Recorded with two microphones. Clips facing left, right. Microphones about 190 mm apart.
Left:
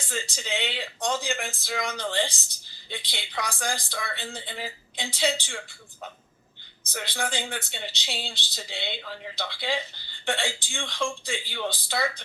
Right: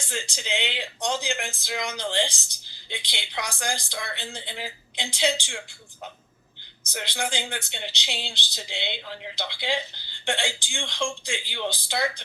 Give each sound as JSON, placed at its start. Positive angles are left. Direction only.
{"t": 0.1, "sound": "speech", "side_deg": 0}
{"t": 6.8, "sound": "speech", "side_deg": 0}